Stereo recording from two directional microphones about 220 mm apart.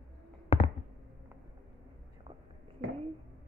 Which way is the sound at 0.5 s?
25° left (ahead or behind).